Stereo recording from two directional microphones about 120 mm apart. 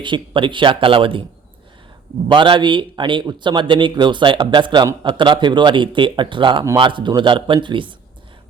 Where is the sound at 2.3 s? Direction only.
45° right (ahead or behind).